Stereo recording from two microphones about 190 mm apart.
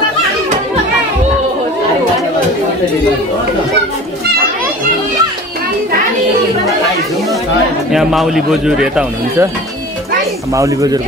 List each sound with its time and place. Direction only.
7.9 s speech: centre (ahead or behind)
10.5 s speech: 15° right (ahead or behind)